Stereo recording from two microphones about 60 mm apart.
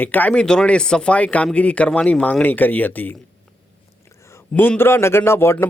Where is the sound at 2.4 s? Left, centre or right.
Left.